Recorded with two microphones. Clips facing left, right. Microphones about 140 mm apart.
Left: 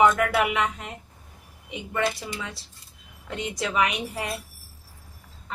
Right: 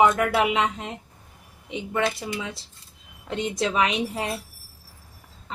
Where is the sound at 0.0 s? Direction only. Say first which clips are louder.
Right 1 dB; 25° right (ahead or behind).